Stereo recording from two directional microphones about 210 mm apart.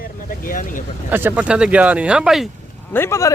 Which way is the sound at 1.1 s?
10° right (ahead or behind).